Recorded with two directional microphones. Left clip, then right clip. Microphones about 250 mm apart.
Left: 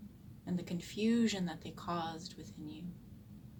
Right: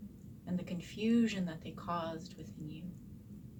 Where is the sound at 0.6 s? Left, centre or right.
Left.